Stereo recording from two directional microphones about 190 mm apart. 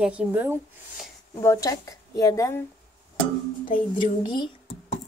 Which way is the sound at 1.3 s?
15° left (ahead or behind).